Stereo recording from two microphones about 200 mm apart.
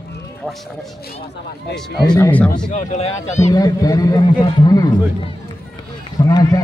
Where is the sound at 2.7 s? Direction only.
35° left (ahead or behind).